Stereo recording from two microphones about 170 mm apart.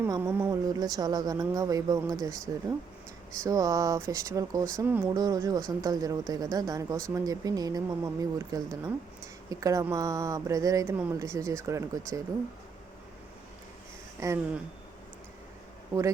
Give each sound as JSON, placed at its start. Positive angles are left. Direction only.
{"t": 0.2, "sound": "speech", "side_deg": -10}
{"t": 3.4, "sound": "speech", "side_deg": -20}
{"t": 14.2, "sound": "speech", "side_deg": -15}